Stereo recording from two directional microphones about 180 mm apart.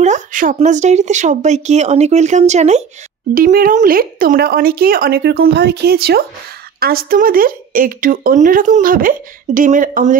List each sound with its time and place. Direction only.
0.0 s speech: 45° right (ahead or behind)
3.3 s speech: 50° right (ahead or behind)